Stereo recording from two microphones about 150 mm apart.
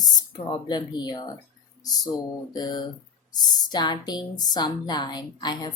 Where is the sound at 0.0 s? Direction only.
25° left (ahead or behind).